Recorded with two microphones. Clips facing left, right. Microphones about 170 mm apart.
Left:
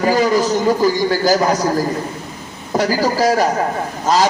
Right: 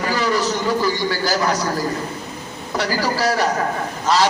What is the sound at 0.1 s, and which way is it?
A man's voice, 45° left (ahead or behind).